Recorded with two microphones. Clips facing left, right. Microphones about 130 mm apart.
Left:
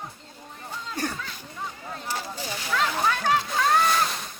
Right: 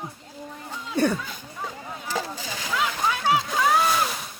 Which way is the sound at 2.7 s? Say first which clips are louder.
Left 1 dB; 10° right (ahead or behind).